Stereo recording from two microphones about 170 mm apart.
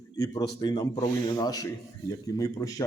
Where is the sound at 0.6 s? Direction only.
25° left (ahead or behind).